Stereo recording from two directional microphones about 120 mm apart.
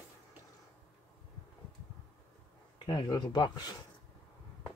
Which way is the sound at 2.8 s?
35° left (ahead or behind).